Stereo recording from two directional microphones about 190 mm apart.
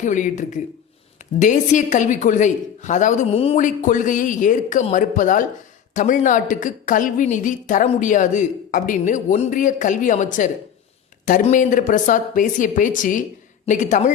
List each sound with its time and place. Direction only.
0.0 s a woman's voice: 40° left (ahead or behind)